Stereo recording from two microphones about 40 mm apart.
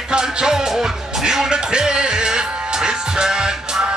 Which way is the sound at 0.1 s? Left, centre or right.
Right.